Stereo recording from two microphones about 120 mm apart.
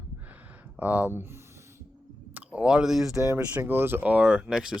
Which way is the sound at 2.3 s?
10° right (ahead or behind).